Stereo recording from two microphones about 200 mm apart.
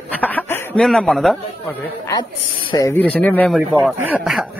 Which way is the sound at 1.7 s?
20° left (ahead or behind).